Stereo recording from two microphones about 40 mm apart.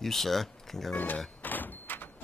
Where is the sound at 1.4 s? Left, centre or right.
Left.